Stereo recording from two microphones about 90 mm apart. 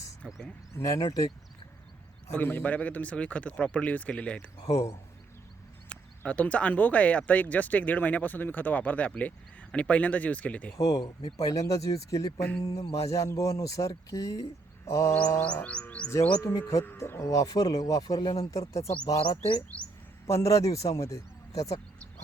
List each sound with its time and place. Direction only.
0.7 s speech: 40° left (ahead or behind)
2.3 s speech: 20° left (ahead or behind)
4.6 s speech: 40° left (ahead or behind)
5.9 s speech: 15° left (ahead or behind)
10.8 s speech: 40° left (ahead or behind)
11.0 s speech: 65° left (ahead or behind)
11.3 s speech: 40° left (ahead or behind)
15.6 s speech: 15° left (ahead or behind)
16.4 s speech: 35° left (ahead or behind)
19.3 s speech: 50° left (ahead or behind)
20.2 s speech: 35° left (ahead or behind)